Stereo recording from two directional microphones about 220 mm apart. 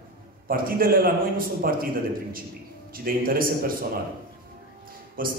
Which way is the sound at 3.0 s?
40° right (ahead or behind).